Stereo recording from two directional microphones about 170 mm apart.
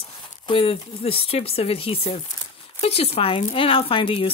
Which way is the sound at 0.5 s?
35° left (ahead or behind).